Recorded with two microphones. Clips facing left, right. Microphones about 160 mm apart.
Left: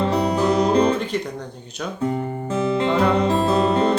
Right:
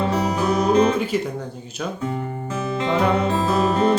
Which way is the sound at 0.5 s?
35° left (ahead or behind).